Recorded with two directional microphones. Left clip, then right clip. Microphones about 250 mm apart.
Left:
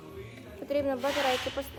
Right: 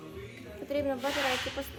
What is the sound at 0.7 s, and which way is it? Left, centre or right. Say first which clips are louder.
Speech: left 2 dB; centre.